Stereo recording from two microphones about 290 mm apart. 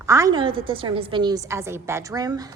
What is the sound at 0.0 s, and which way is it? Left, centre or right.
A woman's voice, centre.